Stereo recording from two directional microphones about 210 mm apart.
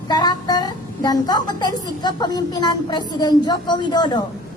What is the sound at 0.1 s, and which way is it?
A woman's voice, 20° left (ahead or behind).